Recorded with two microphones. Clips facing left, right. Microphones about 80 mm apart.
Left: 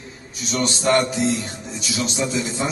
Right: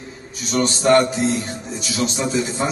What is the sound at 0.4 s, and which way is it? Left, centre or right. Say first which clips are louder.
A man's voice: right 3 dB; right.